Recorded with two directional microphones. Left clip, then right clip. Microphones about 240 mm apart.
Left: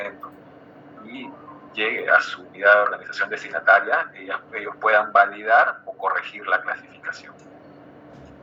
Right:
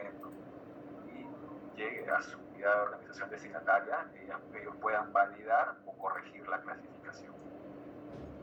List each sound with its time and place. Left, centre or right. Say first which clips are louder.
1.8 s speech: left 16 dB; left